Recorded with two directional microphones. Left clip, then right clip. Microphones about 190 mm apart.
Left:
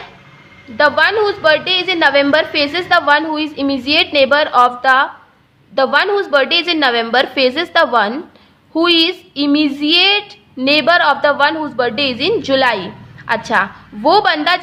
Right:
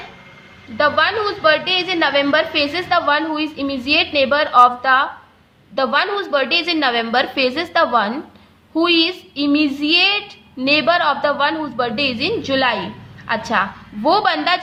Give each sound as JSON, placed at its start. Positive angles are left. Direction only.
{"t": 0.8, "sound": "child singing", "side_deg": 30}